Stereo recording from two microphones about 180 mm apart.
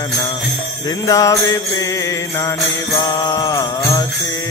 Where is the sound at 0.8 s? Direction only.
20° left (ahead or behind).